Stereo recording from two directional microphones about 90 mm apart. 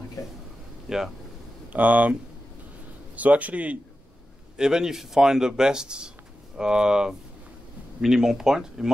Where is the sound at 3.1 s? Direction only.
15° right (ahead or behind).